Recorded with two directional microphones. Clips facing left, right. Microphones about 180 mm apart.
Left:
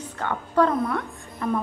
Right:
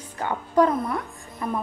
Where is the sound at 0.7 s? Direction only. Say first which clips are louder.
Left 1 dB; centre (ahead or behind).